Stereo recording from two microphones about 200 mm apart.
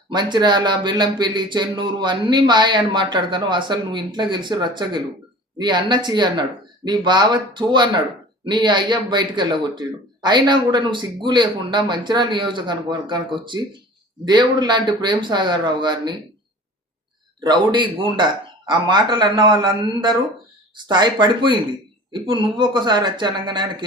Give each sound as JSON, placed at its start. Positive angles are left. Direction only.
{"t": 0.1, "sound": "speech", "side_deg": -20}
{"t": 17.4, "sound": "speech", "side_deg": -20}